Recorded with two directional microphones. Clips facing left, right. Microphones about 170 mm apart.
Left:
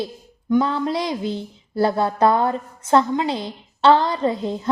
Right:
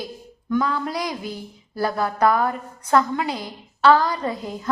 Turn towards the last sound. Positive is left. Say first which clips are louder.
# left 6 dB
turn(degrees=25)  # may be behind; listen again after turning